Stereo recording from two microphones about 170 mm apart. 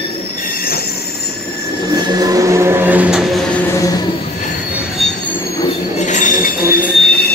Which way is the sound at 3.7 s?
20° left (ahead or behind).